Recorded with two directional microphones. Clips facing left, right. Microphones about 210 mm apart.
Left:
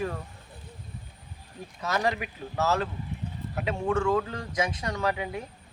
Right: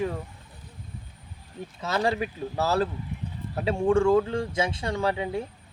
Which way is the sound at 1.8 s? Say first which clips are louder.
Right 2 dB; 30° right (ahead or behind).